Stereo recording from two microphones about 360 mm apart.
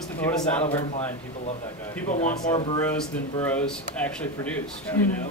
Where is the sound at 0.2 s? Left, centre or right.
Centre.